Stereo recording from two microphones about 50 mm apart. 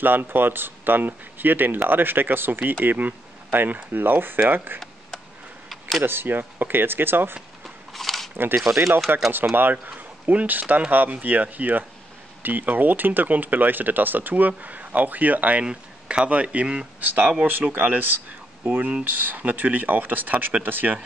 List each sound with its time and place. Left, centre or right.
0.0 s speech: right
5.7 s a sound: centre
6.0 s speech: right
7.6 s scissors: centre
8.7 s a man's voice: right
15.6 s speech: centre
16.3 s speech: right
17.0 s speech: right
18.6 s speech: right